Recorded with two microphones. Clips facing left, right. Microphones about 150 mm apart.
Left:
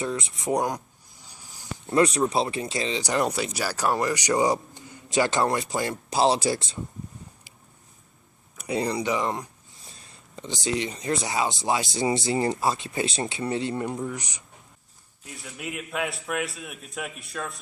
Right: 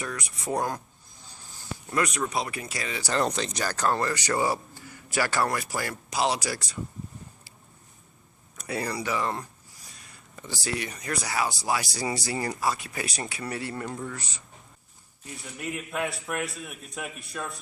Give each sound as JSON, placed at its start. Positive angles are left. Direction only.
{"t": 0.0, "sound": "speech", "side_deg": 25}
{"t": 1.2, "sound": "a sound", "side_deg": 15}
{"t": 2.0, "sound": "speech", "side_deg": 30}
{"t": 8.5, "sound": "speech", "side_deg": 20}
{"t": 15.2, "sound": "a man's voice", "side_deg": 5}